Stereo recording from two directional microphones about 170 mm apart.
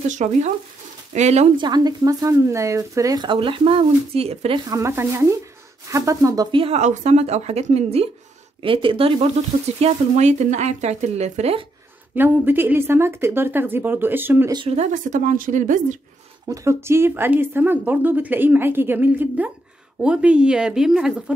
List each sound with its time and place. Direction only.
0.1 s speech: 45° right (ahead or behind)
1.7 s speech: 25° right (ahead or behind)
4.6 s speech: 15° right (ahead or behind); by 11.6 s 40° right (ahead or behind)
12.2 s speech: 10° right (ahead or behind)
14.5 s speech: 30° right (ahead or behind)
14.8 s speech: 45° right (ahead or behind)
16.4 s speech: 15° right (ahead or behind)